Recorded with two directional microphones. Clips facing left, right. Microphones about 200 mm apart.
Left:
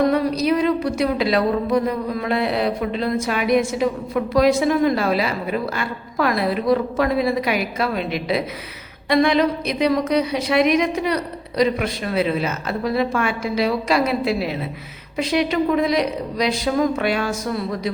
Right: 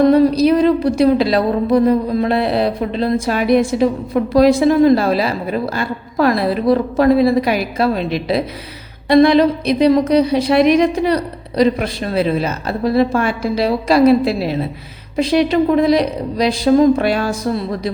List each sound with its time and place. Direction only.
0.1 s a woman's voice: 30° right (ahead or behind)